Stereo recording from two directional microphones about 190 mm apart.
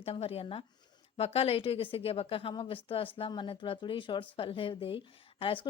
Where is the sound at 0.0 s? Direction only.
30° left (ahead or behind).